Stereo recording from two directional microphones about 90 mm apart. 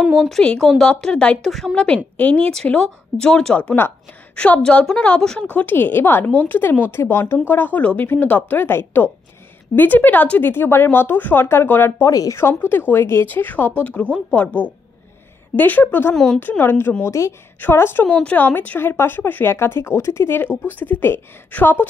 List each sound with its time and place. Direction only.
0.0 s speech: 5° left (ahead or behind)
1.5 s speech: centre (ahead or behind)
2.1 s speech: 15° left (ahead or behind)
12.1 s a woman's voice: 40° left (ahead or behind)
12.4 s speech: 25° left (ahead or behind)
15.5 s a woman's voice: 20° left (ahead or behind)